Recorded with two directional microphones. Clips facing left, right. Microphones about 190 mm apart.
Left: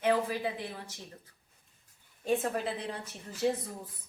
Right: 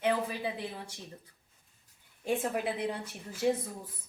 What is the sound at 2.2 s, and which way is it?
A woman's voice, 10° right (ahead or behind).